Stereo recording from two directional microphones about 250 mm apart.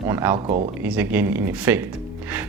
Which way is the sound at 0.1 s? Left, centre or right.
Centre.